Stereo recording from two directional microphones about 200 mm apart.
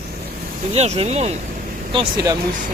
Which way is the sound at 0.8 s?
30° right (ahead or behind).